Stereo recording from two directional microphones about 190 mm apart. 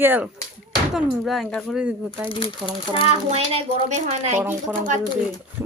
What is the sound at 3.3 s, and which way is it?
A woman's voice, 35° right (ahead or behind).